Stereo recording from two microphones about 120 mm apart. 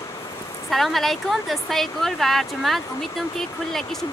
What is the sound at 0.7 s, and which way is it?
Speech, centre (ahead or behind).